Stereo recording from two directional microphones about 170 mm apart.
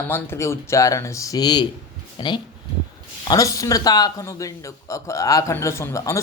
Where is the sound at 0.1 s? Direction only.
15° left (ahead or behind).